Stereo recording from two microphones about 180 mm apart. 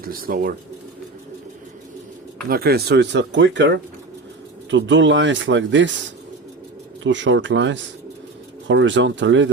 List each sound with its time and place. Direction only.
0.0 s speech: 55° right (ahead or behind)
2.5 s speech: 60° right (ahead or behind); by 3.8 s 80° right
4.7 s speech: 90° right
7.0 s speech: 90° right